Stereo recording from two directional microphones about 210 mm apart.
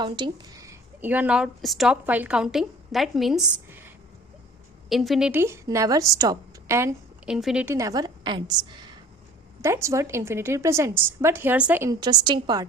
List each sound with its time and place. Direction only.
0.0 s a woman's voice: 20° right (ahead or behind); by 3.4 s centre (ahead or behind)
4.9 s a woman's voice: centre (ahead or behind); by 12.6 s 20° right (ahead or behind)